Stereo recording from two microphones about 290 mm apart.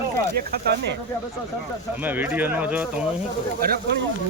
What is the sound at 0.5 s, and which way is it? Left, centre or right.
Speech, right.